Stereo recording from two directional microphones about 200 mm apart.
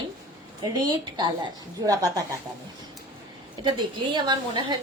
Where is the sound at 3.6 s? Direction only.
20° right (ahead or behind).